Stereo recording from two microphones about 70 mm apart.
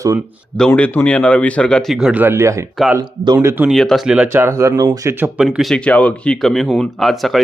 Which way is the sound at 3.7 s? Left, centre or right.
Centre.